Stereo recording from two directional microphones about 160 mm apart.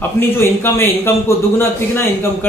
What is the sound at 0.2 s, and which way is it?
A man's voice, 15° left (ahead or behind).